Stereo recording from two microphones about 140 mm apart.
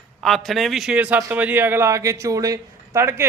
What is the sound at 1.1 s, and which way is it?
A man's voice, 20° right (ahead or behind).